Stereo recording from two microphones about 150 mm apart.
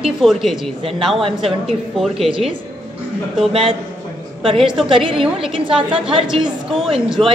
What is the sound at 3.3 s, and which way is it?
Speech, 5° right (ahead or behind).